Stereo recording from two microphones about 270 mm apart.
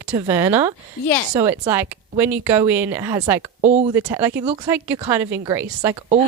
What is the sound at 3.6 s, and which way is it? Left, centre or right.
Speech, right.